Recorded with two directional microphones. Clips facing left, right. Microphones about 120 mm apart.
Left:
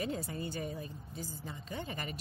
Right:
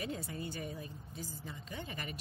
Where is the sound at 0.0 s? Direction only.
35° left (ahead or behind).